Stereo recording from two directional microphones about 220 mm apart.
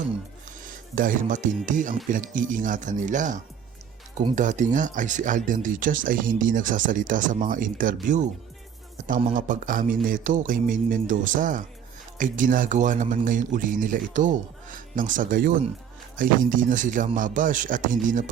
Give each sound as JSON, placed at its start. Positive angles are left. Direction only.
{"t": 0.6, "sound": "speech", "side_deg": -40}
{"t": 2.0, "sound": "music", "side_deg": -35}
{"t": 9.0, "sound": "music", "side_deg": -35}